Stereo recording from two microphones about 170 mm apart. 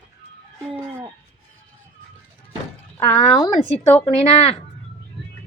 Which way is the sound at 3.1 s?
35° left (ahead or behind).